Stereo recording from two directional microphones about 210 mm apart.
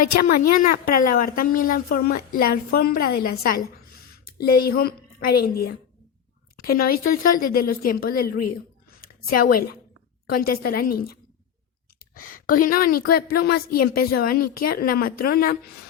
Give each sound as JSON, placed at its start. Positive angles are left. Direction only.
{"t": 0.2, "sound": "a woman's voice", "side_deg": 40}
{"t": 12.1, "sound": "a sound", "side_deg": 40}
{"t": 12.6, "sound": "a woman's voice", "side_deg": 45}